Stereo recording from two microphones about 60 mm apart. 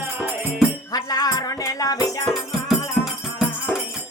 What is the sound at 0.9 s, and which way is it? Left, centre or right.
Music, left.